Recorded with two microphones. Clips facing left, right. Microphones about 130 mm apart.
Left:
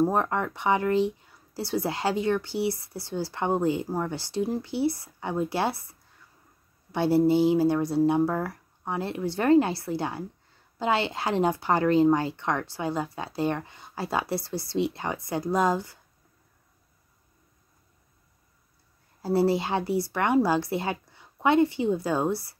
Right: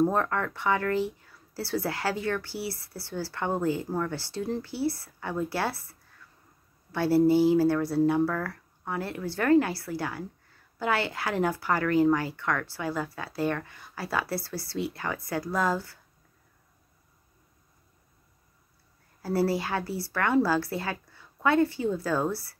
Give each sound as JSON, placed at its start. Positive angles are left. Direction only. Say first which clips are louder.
{"t": 0.0, "sound": "speech", "louder": "left 1 dB", "side_deg": 15}
{"t": 19.2, "sound": "speech", "louder": "left 3 dB", "side_deg": 20}